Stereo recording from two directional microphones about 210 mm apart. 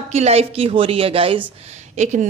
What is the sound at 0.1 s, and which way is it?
A woman's voice, 30° right (ahead or behind).